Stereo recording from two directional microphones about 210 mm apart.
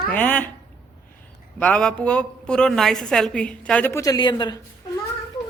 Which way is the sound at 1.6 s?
5° left (ahead or behind).